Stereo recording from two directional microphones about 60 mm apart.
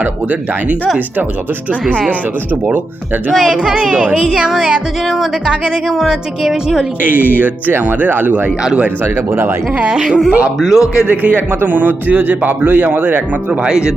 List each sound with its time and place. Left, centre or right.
0.0 s a man's voice: right
3.3 s speech: centre
7.0 s a man's voice: right
9.0 s speech: right
9.9 s a man's voice: centre
11.0 s a man's voice: right
13.5 s speech: centre